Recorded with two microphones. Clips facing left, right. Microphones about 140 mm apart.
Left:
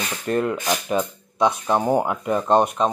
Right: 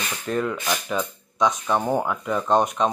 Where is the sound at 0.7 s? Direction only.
20° left (ahead or behind).